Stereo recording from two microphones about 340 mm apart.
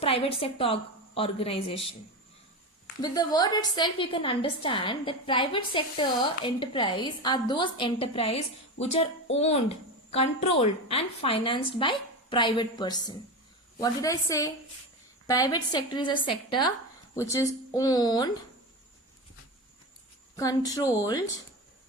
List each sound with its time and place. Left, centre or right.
0.0 s a woman's voice: centre
3.0 s a woman's voice: centre
20.3 s a woman's voice: centre